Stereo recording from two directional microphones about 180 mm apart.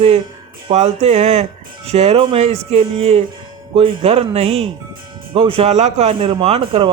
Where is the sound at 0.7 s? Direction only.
35° right (ahead or behind).